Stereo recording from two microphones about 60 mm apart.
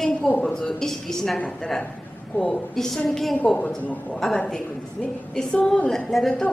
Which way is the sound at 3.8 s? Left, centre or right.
Left.